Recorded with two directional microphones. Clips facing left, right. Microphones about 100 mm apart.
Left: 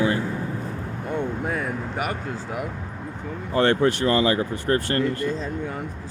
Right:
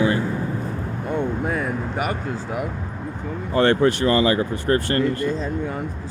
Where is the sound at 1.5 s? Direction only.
10° right (ahead or behind).